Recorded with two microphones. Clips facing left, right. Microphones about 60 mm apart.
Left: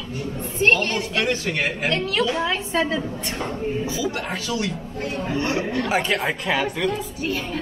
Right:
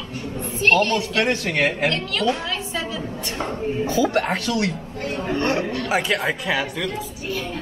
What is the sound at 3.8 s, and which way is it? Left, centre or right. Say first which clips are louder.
A man's voice: right 6 dB; right.